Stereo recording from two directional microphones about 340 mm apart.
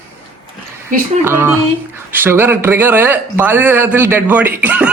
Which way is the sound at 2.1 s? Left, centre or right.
Centre.